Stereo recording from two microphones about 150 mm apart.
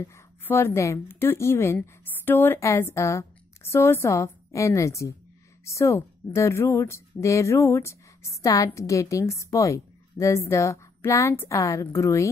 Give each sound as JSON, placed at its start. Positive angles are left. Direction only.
{"t": 0.0, "sound": "a woman's voice", "side_deg": 15}